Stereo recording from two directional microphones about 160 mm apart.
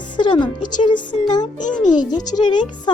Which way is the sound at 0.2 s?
30° left (ahead or behind).